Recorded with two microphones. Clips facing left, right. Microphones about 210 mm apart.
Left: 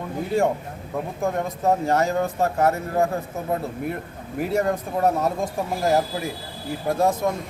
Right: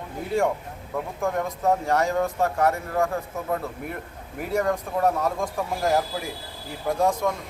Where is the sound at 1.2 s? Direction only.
20° left (ahead or behind).